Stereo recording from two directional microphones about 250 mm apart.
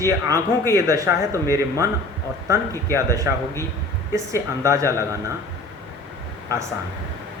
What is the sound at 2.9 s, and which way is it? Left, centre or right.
Speech, centre.